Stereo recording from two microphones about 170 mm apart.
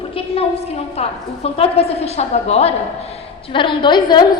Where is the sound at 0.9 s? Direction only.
35° left (ahead or behind).